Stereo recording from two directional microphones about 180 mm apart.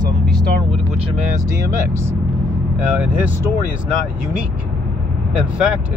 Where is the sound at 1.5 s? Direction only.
15° right (ahead or behind).